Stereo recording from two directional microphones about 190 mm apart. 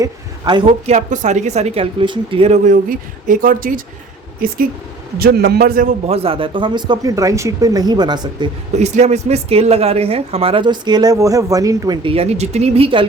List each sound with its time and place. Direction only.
0.0 s speech: 25° right (ahead or behind); by 3.8 s 45° right (ahead or behind)
5.2 s a man's voice: 55° right (ahead or behind)
6.1 s speech: 30° right (ahead or behind)
8.8 s speech: 35° right (ahead or behind)